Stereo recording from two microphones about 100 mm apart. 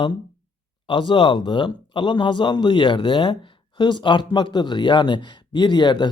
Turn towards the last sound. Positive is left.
turn(degrees=50)  # may be behind; listen again after turning